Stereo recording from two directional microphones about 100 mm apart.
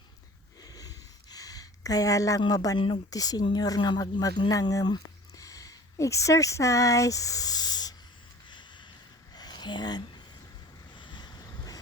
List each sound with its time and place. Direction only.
0.6 s a sound: 40° left (ahead or behind)
2.5 s speech: 40° left (ahead or behind)
2.7 s speech: 55° left (ahead or behind)
3.1 s speech: 40° left (ahead or behind)
8.4 s a sound: 50° left (ahead or behind)
10.9 s boat: 50° left (ahead or behind)